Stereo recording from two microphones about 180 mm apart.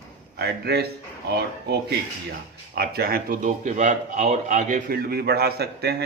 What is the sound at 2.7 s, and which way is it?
A man's voice, 60° right (ahead or behind).